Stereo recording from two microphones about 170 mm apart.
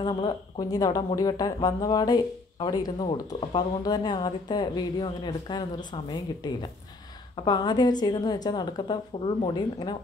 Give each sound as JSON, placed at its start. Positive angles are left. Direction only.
{"t": 0.1, "sound": "speech", "side_deg": 30}